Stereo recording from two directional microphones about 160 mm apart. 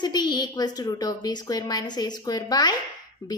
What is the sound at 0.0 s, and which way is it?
A woman's voice, 25° left (ahead or behind).